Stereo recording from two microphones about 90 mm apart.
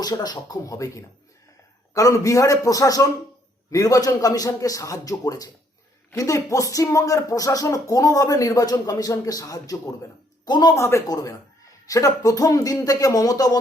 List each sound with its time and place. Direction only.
0.0 s speech: 45° left (ahead or behind)
10.8 s speech: 35° left (ahead or behind)